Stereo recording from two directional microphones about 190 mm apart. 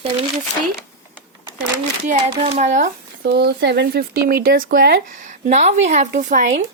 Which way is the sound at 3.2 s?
60° right (ahead or behind).